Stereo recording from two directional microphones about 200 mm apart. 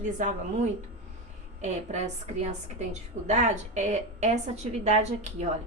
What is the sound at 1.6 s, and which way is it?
A woman's voice, 35° right (ahead or behind).